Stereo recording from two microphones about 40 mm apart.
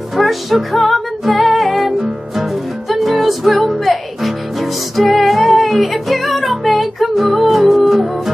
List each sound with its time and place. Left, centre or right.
0.1 s music: centre